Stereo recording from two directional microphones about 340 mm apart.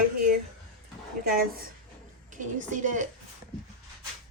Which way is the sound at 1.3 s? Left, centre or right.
Right.